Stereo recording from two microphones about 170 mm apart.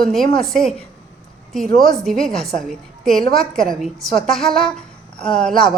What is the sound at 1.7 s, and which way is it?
A woman's voice, centre (ahead or behind).